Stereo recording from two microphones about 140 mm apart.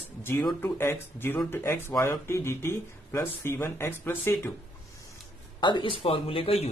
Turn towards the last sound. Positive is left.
turn(degrees=45)  # may be behind; listen again after turning